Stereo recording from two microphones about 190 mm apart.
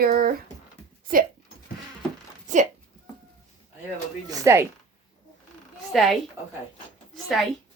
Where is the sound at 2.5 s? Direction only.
40° right (ahead or behind).